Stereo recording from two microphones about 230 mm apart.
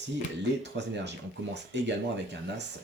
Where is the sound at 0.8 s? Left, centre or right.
Right.